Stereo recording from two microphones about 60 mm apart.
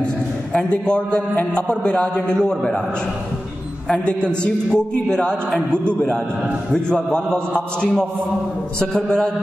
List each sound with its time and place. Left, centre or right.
0.0 s a man's voice: centre
4.0 s a man's voice: centre